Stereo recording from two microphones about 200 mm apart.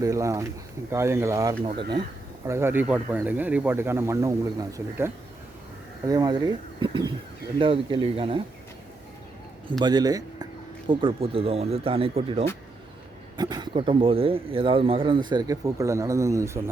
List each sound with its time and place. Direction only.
0.0 s speech: 15° right (ahead or behind)
2.5 s speech: 10° right (ahead or behind); by 8.4 s 25° right (ahead or behind)
9.8 s speech: 20° right (ahead or behind)